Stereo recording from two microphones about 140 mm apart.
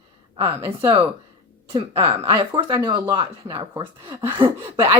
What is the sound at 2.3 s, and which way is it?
Speech, 30° right (ahead or behind).